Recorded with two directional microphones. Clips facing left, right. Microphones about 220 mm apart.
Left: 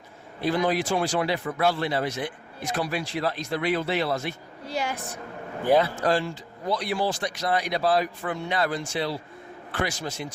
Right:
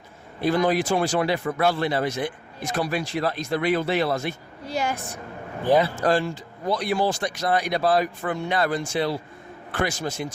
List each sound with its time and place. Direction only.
0.4 s a man's voice: 45° right (ahead or behind)
6.0 s a man's voice: 50° right (ahead or behind)